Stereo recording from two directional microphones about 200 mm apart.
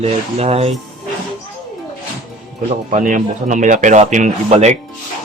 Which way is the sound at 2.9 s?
40° right (ahead or behind).